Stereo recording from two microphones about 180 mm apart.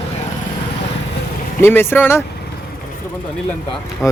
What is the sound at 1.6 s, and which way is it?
Speech, 15° left (ahead or behind).